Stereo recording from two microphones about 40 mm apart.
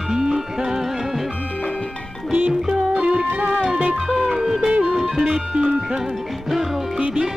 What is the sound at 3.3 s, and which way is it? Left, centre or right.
Music, right.